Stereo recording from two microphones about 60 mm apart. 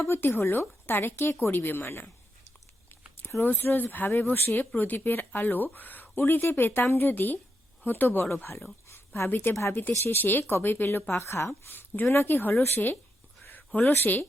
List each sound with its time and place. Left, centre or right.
0.0 s speech: left
3.4 s speech: left
8.9 s a sound: left
9.3 s a woman's voice: left
11.1 s a woman's voice: left
11.7 s speech: left
13.4 s a sound: left
13.7 s speech: left